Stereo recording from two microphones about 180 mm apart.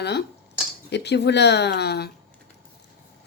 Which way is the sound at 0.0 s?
65° left (ahead or behind).